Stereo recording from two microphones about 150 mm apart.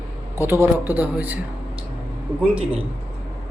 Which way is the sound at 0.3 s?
15° right (ahead or behind).